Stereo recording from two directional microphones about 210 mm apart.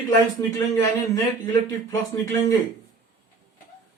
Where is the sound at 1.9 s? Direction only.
15° left (ahead or behind).